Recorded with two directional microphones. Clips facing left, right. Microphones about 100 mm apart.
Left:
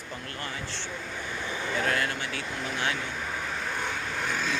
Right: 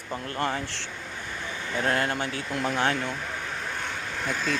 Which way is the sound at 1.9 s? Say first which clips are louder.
Right 3 dB; 35° right (ahead or behind).